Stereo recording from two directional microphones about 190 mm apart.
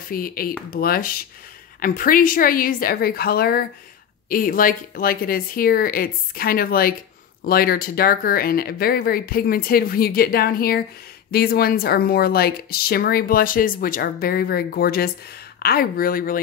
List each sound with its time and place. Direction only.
0.1 s speech: 50° left (ahead or behind)